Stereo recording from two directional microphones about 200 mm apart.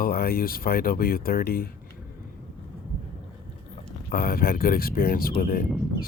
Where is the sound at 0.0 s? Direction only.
50° left (ahead or behind).